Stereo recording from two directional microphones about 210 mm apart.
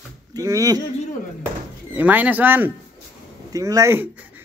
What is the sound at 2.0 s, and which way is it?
Speech, 10° right (ahead or behind).